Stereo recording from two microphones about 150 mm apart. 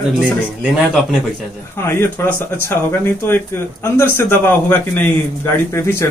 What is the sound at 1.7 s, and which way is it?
A man's voice, 15° left (ahead or behind).